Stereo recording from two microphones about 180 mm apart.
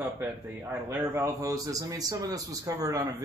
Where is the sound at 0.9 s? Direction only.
15° right (ahead or behind).